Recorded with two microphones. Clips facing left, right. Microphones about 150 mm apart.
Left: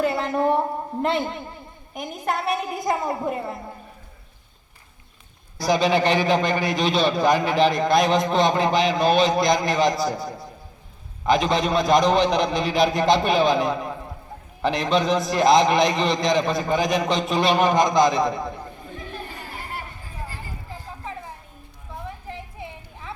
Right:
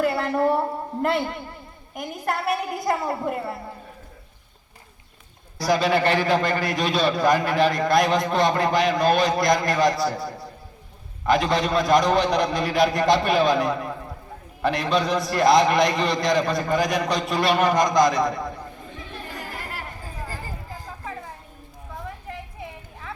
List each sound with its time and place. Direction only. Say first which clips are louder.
0.0 s a man's voice: even; 20° left (ahead or behind)
5.5 s a man's voice: left 1 dB; 20° left (ahead or behind)
19.5 s chatter: left 1 dB; 60° right (ahead or behind)